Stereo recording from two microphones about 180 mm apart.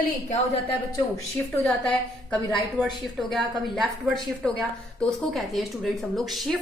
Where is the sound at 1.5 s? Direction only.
5° left (ahead or behind).